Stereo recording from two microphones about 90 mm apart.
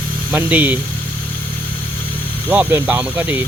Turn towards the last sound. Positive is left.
turn(degrees=-20)  # may be behind; listen again after turning